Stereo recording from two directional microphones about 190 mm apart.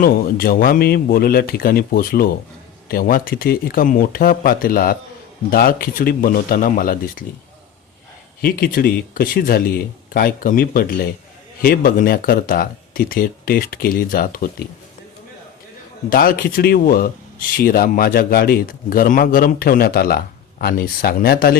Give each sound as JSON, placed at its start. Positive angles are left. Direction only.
{"t": 0.0, "sound": "a man's voice", "side_deg": 50}
{"t": 8.4, "sound": "a man's voice", "side_deg": 50}
{"t": 16.0, "sound": "a man's voice", "side_deg": 50}